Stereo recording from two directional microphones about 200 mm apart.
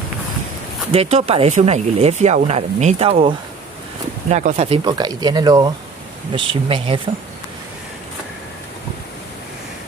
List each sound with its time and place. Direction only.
0.9 s speech: 30° right (ahead or behind)